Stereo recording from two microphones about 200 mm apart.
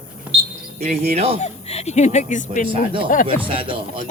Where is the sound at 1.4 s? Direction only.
30° left (ahead or behind).